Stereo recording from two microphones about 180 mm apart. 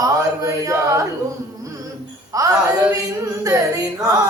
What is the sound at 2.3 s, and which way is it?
Music, 20° right (ahead or behind).